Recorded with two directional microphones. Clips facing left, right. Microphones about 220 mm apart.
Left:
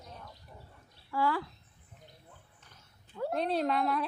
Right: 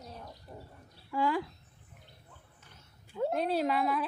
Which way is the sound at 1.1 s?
15° right (ahead or behind).